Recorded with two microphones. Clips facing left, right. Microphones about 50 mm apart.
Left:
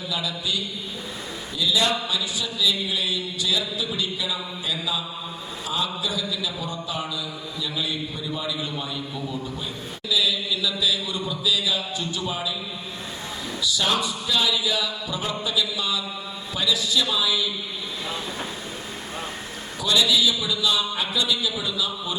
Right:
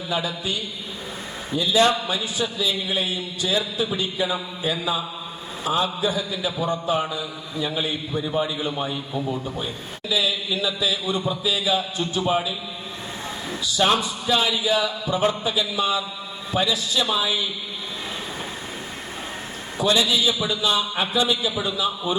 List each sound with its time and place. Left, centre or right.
0.1 s a man's voice: right
10.1 s a man's voice: right
13.6 s a man's voice: right
19.8 s a man's voice: right